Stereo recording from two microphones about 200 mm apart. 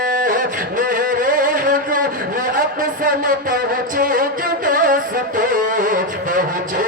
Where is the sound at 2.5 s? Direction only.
45° right (ahead or behind).